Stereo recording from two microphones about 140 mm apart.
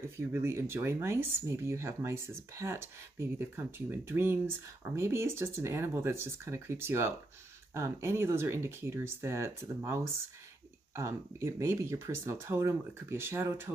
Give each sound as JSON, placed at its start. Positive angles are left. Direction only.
{"t": 0.2, "sound": "speech", "side_deg": -20}
{"t": 11.0, "sound": "speech", "side_deg": -20}